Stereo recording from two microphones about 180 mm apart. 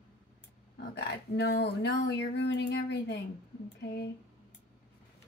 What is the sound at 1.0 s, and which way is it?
Speech, 65° left (ahead or behind).